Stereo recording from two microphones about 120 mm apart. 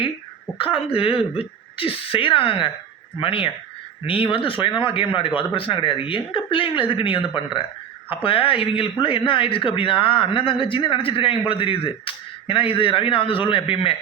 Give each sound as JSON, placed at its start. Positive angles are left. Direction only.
{"t": 0.6, "sound": "a man's voice", "side_deg": 50}